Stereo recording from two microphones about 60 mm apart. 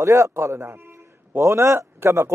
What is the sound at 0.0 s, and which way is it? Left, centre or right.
A man's voice, right.